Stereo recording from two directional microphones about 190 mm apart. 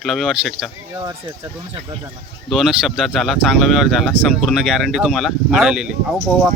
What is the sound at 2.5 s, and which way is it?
Speech, centre (ahead or behind).